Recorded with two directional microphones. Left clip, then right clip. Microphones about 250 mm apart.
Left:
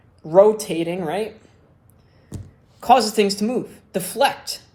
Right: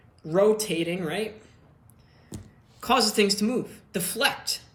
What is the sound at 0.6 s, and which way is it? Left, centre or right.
Speech, centre.